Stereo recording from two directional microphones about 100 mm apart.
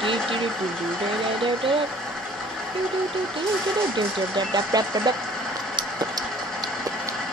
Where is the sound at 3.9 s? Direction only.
50° right (ahead or behind).